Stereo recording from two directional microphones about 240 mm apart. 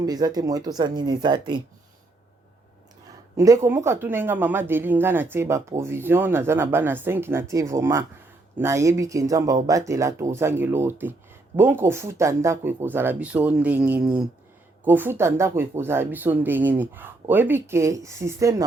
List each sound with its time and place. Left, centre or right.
0.0 s speech: centre
3.3 s speech: centre